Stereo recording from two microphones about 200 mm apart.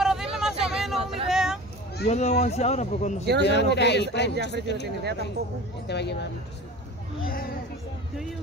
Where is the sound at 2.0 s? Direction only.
35° left (ahead or behind).